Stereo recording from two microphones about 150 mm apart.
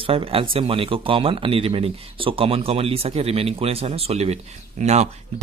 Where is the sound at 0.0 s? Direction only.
40° right (ahead or behind).